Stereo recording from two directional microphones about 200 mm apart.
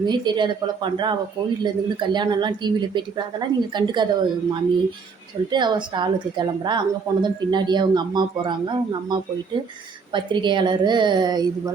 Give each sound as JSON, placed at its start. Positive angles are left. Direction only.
{"t": 0.0, "sound": "a woman's voice", "side_deg": -20}